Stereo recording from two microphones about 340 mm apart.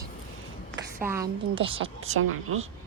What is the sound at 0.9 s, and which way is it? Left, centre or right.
A woman's voice, centre.